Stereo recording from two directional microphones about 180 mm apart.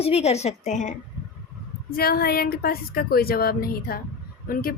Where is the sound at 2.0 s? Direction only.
55° left (ahead or behind).